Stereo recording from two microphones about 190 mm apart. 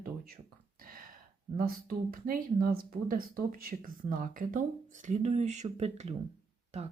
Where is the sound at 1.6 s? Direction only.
50° right (ahead or behind).